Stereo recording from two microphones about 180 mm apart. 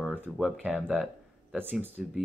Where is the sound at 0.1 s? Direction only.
10° right (ahead or behind).